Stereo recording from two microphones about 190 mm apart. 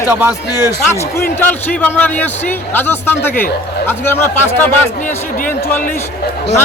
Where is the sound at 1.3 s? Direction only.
10° left (ahead or behind).